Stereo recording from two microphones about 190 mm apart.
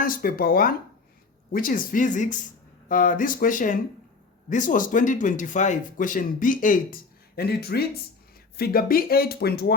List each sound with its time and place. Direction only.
0.0 s speech: 50° left (ahead or behind)